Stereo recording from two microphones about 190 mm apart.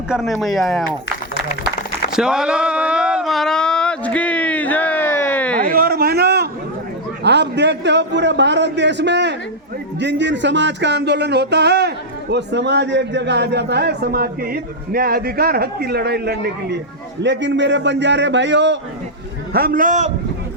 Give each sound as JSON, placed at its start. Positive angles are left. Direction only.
{"t": 0.1, "sound": "speech", "side_deg": 0}
{"t": 2.1, "sound": "a sound", "side_deg": -5}
{"t": 5.6, "sound": "a sound", "side_deg": -50}
{"t": 10.0, "sound": "speech", "side_deg": -65}
{"t": 17.2, "sound": "a man's voice", "side_deg": -70}
{"t": 19.5, "sound": "a man's voice", "side_deg": -50}